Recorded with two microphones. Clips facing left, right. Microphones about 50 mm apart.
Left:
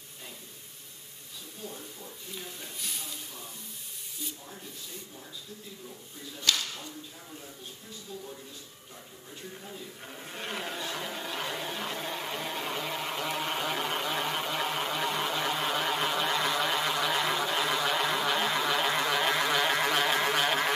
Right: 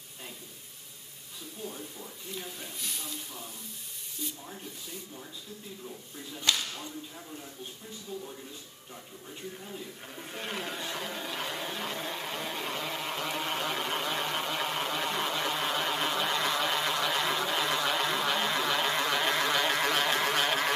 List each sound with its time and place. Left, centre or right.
2.3 s speech: centre
6.5 s speech: centre
9.5 s television: centre